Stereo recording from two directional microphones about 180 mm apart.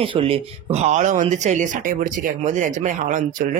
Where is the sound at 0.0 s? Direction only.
30° right (ahead or behind).